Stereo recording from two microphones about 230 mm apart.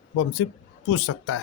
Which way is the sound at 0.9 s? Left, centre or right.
Left.